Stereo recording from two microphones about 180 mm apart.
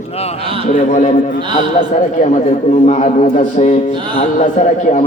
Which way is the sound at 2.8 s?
40° left (ahead or behind).